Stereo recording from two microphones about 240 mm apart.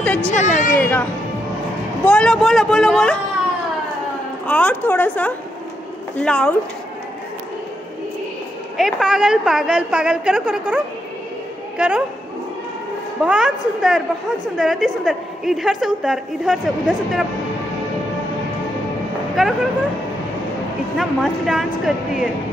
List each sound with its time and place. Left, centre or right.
0.0 s a sound: centre
0.3 s a woman's voice: left
0.7 s speech: centre
2.0 s a woman's voice: centre
4.5 s a woman's voice: centre
8.7 s a woman's voice: centre
11.8 s a woman's voice: centre
13.2 s a woman's voice: centre
19.4 s a woman's voice: centre
21.0 s a woman's voice: centre